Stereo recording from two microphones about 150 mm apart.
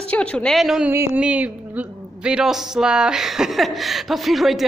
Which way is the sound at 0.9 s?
15° right (ahead or behind).